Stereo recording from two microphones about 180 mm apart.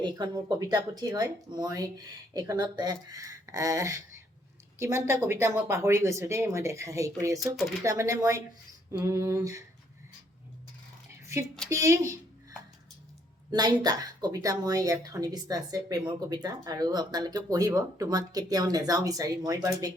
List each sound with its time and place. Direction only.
0.0 s a woman's voice: 25° right (ahead or behind)
7.4 s speech: centre (ahead or behind)
7.9 s speech: 15° right (ahead or behind)
11.7 s speech: 15° right (ahead or behind)
13.5 s a woman's voice: 25° right (ahead or behind)